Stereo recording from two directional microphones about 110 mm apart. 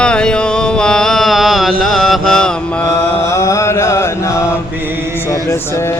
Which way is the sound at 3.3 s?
30° left (ahead or behind).